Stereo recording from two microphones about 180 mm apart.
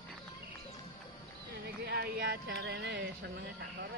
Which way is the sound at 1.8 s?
60° right (ahead or behind).